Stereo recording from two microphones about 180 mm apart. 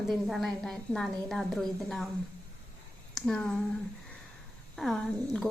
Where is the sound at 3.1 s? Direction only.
5° left (ahead or behind).